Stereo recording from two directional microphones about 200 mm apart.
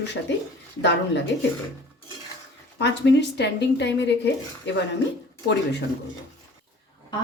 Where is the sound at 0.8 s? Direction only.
60° left (ahead or behind).